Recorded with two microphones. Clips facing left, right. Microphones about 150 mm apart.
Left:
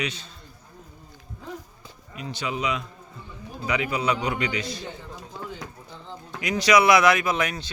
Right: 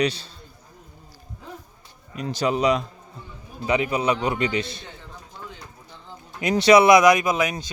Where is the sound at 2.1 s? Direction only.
40° right (ahead or behind).